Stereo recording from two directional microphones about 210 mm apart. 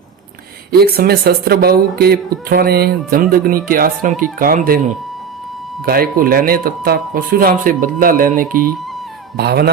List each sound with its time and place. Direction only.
0.7 s speech: 45° right (ahead or behind)